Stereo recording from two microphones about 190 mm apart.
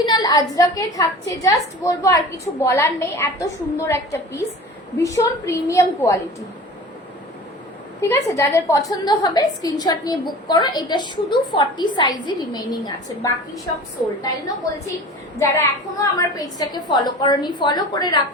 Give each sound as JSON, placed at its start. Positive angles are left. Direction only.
{"t": 0.0, "sound": "a woman's voice", "side_deg": 20}
{"t": 8.0, "sound": "a woman's voice", "side_deg": 15}
{"t": 15.4, "sound": "a woman's voice", "side_deg": 15}